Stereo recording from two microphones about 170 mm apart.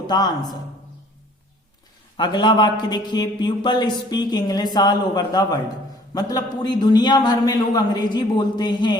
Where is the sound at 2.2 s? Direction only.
25° left (ahead or behind).